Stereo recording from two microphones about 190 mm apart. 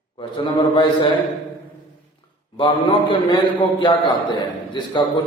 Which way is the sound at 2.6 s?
25° left (ahead or behind).